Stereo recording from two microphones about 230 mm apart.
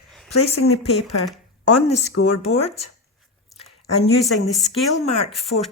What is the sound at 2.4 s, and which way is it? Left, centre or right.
Speech, left.